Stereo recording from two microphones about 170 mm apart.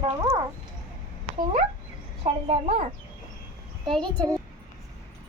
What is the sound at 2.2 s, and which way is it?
Speech, 35° right (ahead or behind).